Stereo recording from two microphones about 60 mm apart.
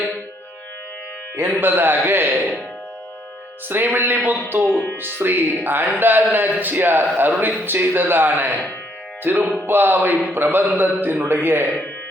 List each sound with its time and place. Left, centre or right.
1.5 s a man's voice: right
3.7 s a man's voice: right